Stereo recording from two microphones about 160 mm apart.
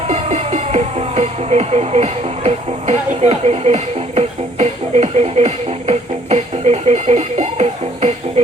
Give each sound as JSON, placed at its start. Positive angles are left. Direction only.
{"t": 0.1, "sound": "music", "side_deg": -40}